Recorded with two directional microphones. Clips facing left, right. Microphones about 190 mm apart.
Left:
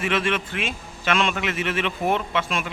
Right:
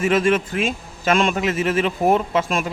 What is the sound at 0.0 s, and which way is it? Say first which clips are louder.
A man's voice: right 6 dB; 45° right (ahead or behind).